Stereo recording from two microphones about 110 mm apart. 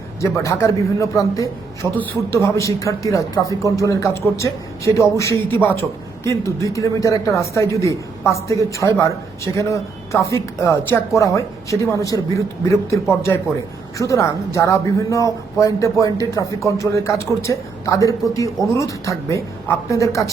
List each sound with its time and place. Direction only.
0.2 s speech: 25° left (ahead or behind)